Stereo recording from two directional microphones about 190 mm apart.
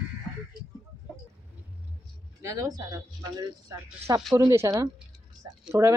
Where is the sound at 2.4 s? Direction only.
15° right (ahead or behind).